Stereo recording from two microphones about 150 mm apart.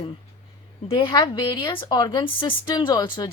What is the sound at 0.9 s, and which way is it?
A woman's voice, 30° left (ahead or behind).